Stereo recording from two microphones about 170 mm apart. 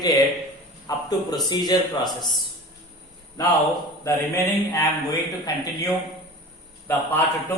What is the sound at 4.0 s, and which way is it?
A man's voice, 15° left (ahead or behind).